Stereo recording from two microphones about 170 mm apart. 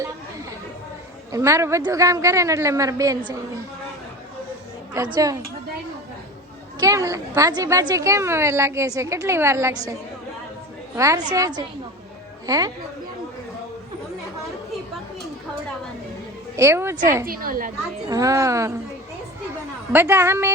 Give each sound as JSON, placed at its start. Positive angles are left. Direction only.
{"t": 1.3, "sound": "a woman's voice", "side_deg": -15}
{"t": 5.1, "sound": "a woman's voice", "side_deg": -20}
{"t": 6.7, "sound": "a woman's voice", "side_deg": -20}
{"t": 10.9, "sound": "a woman's voice", "side_deg": -20}
{"t": 16.6, "sound": "a woman's voice", "side_deg": -15}
{"t": 17.2, "sound": "a woman's voice", "side_deg": -60}
{"t": 18.1, "sound": "a woman's voice", "side_deg": -20}
{"t": 19.9, "sound": "a woman's voice", "side_deg": -15}